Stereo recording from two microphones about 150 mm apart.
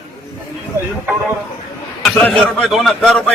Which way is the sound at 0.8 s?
15° right (ahead or behind).